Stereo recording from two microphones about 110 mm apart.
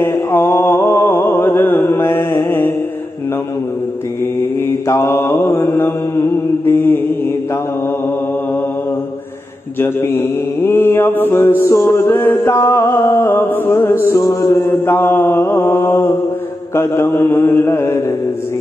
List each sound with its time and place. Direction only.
0.0 s mantra: 20° left (ahead or behind)
4.4 s mantra: 25° left (ahead or behind)
9.8 s mantra: 20° left (ahead or behind)